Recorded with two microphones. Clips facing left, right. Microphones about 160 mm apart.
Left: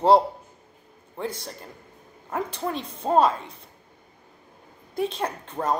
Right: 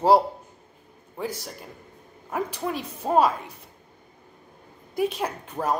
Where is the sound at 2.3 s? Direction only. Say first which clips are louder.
Even; 10° right (ahead or behind).